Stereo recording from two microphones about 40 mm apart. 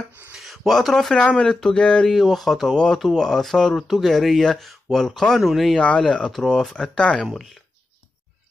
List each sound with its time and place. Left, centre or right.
0.4 s speech: centre; by 2.0 s left
2.0 s speech: centre
2.7 s speech: centre
5.4 s speech: centre
5.8 s speech: left
6.3 s speech: centre